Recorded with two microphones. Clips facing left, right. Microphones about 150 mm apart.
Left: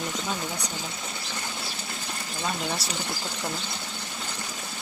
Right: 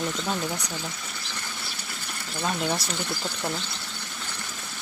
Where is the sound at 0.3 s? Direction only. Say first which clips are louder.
Right 2 dB; 15° left (ahead or behind).